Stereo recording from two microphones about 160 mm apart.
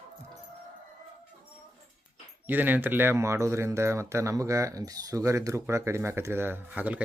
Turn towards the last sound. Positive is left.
turn(degrees=-10)  # may be behind; listen again after turning